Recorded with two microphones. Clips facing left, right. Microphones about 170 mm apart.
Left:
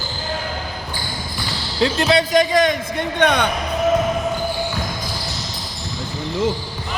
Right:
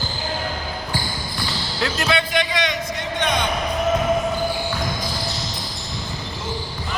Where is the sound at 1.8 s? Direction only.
30° left (ahead or behind); by 3.5 s 60° left (ahead or behind).